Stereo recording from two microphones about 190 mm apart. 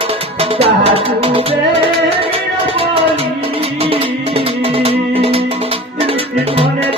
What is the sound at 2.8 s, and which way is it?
Music, 30° right (ahead or behind).